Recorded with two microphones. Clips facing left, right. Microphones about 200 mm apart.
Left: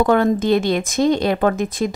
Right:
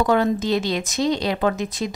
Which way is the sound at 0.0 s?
55° left (ahead or behind).